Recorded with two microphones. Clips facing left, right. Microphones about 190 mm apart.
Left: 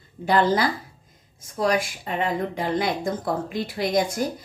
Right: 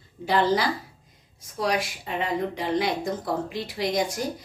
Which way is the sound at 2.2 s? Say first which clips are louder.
Left 2 dB; 50° left (ahead or behind).